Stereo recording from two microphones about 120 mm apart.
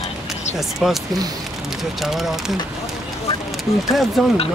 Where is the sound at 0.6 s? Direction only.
Centre (ahead or behind).